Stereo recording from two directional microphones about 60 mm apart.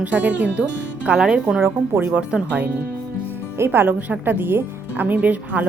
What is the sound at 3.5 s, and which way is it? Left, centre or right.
Speech, right.